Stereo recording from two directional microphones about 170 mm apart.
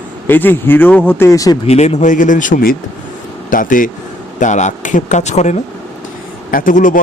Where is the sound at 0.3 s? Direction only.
10° left (ahead or behind).